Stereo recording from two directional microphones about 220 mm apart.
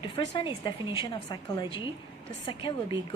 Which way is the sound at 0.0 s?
20° left (ahead or behind).